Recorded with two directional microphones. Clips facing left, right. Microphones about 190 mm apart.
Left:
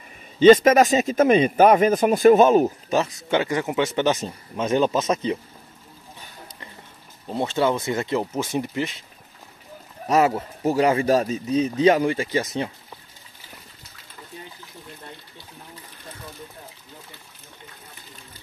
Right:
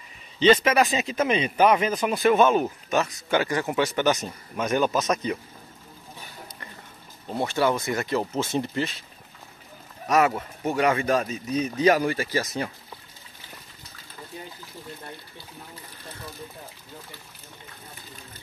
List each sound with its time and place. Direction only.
0.4 s speech: 50° left (ahead or behind); by 5.4 s 25° left (ahead or behind)
7.3 s speech: 20° left (ahead or behind)
10.0 s speech: 30° left (ahead or behind)